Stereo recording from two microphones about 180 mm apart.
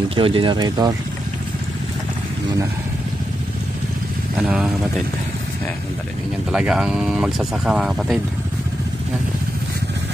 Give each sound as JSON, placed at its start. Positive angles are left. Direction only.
{"t": 0.1, "sound": "speech", "side_deg": -30}
{"t": 4.4, "sound": "speech", "side_deg": -5}
{"t": 6.5, "sound": "speech", "side_deg": -5}